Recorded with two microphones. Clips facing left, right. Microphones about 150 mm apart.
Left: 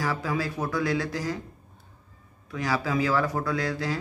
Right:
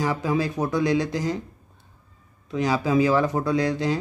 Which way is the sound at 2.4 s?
20° right (ahead or behind).